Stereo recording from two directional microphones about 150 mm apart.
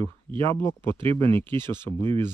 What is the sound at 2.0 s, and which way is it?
Speech, 30° right (ahead or behind).